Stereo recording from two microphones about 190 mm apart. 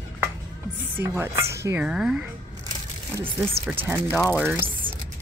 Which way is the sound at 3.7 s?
10° right (ahead or behind).